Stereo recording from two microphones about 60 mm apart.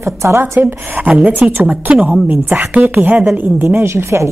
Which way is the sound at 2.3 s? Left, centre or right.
Right.